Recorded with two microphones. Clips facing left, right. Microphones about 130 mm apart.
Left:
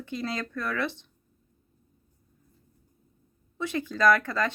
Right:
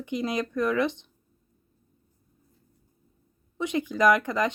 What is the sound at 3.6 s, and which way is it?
Speech, 20° right (ahead or behind).